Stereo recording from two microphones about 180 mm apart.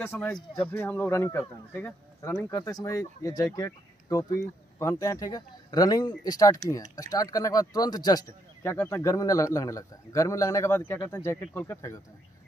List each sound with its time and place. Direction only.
0.0 s a man's voice: 15° left (ahead or behind)